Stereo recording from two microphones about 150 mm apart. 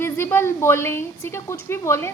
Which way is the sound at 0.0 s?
15° left (ahead or behind).